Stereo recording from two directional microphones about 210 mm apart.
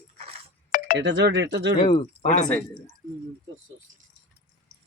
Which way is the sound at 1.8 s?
25° left (ahead or behind).